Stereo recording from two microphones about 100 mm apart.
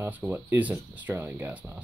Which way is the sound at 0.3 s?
15° right (ahead or behind).